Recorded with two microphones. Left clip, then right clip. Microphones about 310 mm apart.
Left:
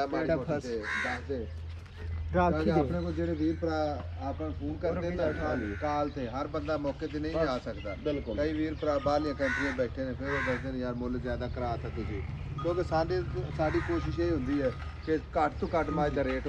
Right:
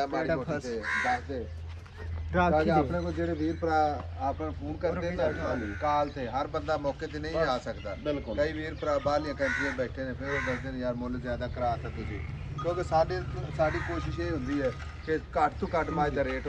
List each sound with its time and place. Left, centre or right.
0.0 s speech: right
0.7 s speech: centre
2.3 s speech: right
2.9 s speech: centre
4.9 s speech: right
9.4 s speech: centre
9.8 s speech: right